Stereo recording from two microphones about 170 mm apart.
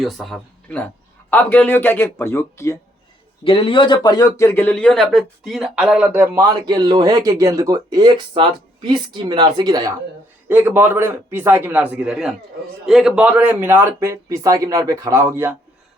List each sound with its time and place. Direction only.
0.0 s speech: centre (ahead or behind)
3.4 s a man's voice: 30° left (ahead or behind); by 9.9 s 20° right (ahead or behind)
10.5 s speech: 10° right (ahead or behind)